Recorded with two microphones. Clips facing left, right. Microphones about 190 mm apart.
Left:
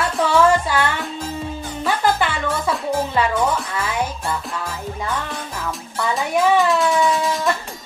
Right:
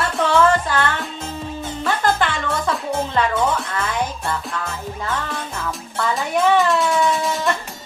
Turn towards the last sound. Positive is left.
turn(degrees=0)  # may be behind; listen again after turning